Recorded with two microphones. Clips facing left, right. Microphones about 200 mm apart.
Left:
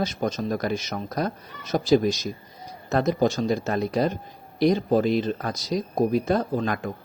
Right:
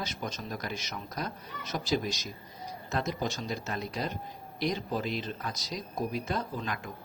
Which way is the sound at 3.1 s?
50° left (ahead or behind).